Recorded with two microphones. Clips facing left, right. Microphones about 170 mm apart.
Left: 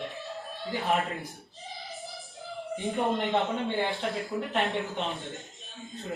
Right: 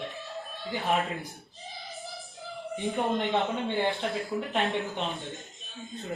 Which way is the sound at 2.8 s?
Centre (ahead or behind).